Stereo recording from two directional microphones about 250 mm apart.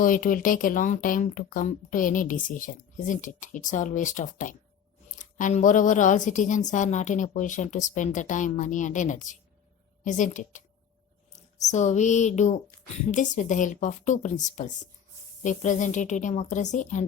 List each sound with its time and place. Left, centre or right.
0.0 s a woman's voice: left
11.6 s a woman's voice: left